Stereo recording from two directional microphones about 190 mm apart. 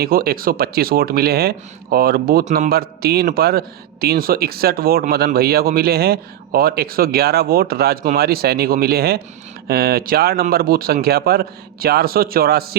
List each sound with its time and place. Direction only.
0.0 s speech: 50° right (ahead or behind)